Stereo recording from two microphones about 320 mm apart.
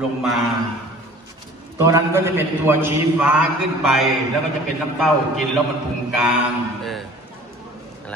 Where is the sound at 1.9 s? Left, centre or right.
Centre.